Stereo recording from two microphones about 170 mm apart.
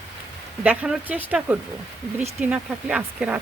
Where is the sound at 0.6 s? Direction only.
10° right (ahead or behind).